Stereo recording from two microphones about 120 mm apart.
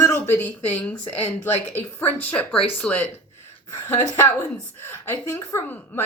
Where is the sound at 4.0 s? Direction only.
30° left (ahead or behind).